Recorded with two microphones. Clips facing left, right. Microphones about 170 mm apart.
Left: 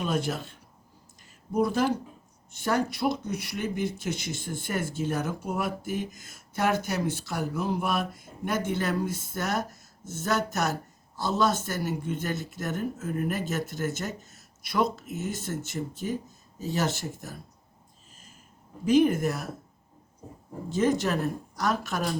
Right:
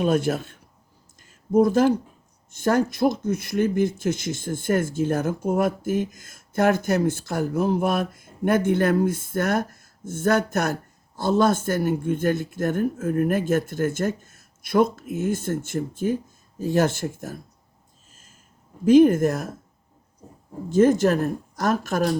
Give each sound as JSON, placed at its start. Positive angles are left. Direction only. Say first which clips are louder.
{"t": 0.0, "sound": "speech", "louder": "right 7 dB", "side_deg": -50}
{"t": 1.5, "sound": "speech", "louder": "right 7 dB", "side_deg": -50}
{"t": 18.9, "sound": "speech", "louder": "right 7 dB", "side_deg": -50}
{"t": 20.7, "sound": "speech", "louder": "right 8 dB", "side_deg": -50}